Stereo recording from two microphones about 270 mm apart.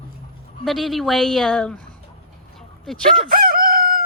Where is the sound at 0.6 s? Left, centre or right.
Centre.